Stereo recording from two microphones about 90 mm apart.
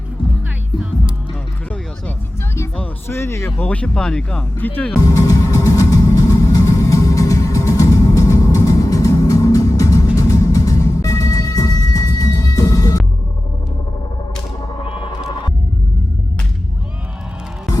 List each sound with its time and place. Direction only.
3.1 s speech: 25° left (ahead or behind)
3.6 s speech: 15° left (ahead or behind)
4.9 s music: 40° left (ahead or behind)